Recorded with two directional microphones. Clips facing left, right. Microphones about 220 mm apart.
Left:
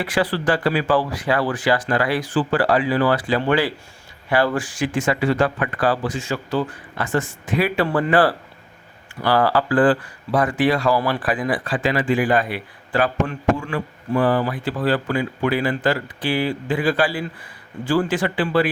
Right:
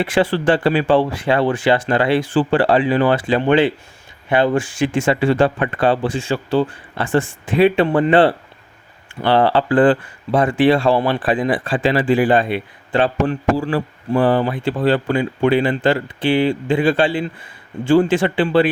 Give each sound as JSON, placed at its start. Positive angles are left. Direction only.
{"t": 0.0, "sound": "speech", "side_deg": -25}